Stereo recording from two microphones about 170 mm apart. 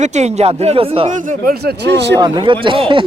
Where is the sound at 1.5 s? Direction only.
70° right (ahead or behind).